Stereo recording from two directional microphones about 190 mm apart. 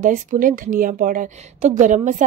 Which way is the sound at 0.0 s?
45° right (ahead or behind).